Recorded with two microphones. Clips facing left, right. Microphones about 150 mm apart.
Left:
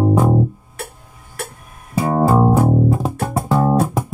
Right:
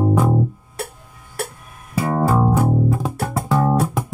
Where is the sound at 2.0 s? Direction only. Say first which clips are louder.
Left 3 dB; 25° left (ahead or behind).